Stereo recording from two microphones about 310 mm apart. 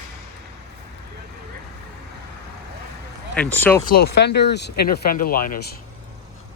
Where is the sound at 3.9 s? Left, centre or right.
Left.